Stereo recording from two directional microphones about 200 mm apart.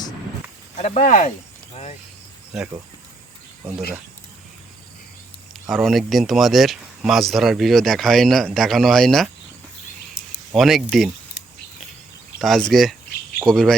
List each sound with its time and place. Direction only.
0.8 s speech: 35° left (ahead or behind)
5.5 s speech: centre (ahead or behind)
10.5 s speech: centre (ahead or behind)
12.4 s speech: centre (ahead or behind)